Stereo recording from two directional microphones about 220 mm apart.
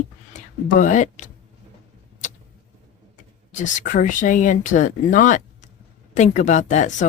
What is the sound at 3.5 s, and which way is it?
Speech, 35° left (ahead or behind).